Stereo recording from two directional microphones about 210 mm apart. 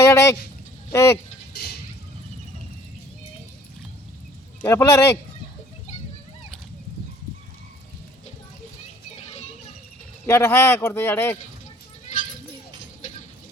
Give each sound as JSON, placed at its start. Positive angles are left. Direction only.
{"t": 0.0, "sound": "speech", "side_deg": 15}
{"t": 4.6, "sound": "speech", "side_deg": 10}
{"t": 9.1, "sound": "music", "side_deg": 30}
{"t": 10.2, "sound": "speech", "side_deg": 10}